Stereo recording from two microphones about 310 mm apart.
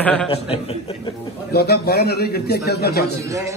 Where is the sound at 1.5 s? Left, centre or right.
Left.